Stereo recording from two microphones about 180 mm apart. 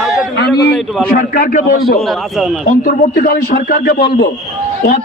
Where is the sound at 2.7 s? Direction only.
55° left (ahead or behind).